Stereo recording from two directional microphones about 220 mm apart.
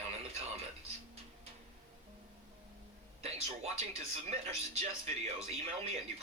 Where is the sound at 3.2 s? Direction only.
25° right (ahead or behind).